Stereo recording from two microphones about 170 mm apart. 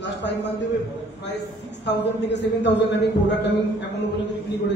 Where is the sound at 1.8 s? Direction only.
90° left.